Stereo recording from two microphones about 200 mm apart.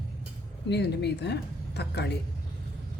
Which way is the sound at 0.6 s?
55° left (ahead or behind).